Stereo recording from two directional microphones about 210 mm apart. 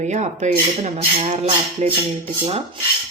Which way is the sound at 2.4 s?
30° right (ahead or behind).